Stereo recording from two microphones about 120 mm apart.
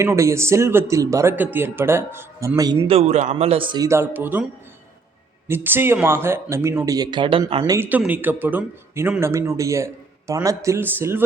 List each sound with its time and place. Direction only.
0.0 s speech: 25° right (ahead or behind)
2.6 s speech: 30° right (ahead or behind)
2.8 s speech: 55° right (ahead or behind)
3.8 s speech: 20° right (ahead or behind)
5.5 s speech: 20° right (ahead or behind)
6.8 s speech: 30° right (ahead or behind)
7.6 s speech: 20° right (ahead or behind)